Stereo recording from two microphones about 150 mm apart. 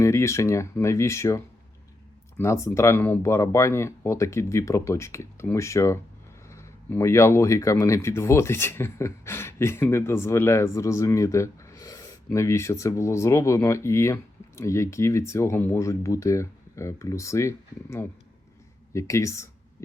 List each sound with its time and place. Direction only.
0.0 s speech: 20° left (ahead or behind)
2.4 s speech: 20° left (ahead or behind)